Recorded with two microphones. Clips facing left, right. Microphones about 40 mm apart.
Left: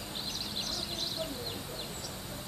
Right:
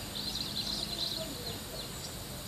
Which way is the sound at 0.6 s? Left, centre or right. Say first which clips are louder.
Left 1 dB; centre.